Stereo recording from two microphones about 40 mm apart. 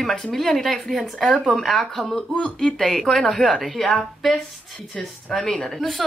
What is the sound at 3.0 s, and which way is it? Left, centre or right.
A woman's voice, centre.